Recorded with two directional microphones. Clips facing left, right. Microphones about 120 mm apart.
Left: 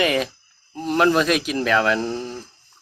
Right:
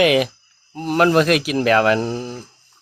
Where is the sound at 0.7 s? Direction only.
5° right (ahead or behind).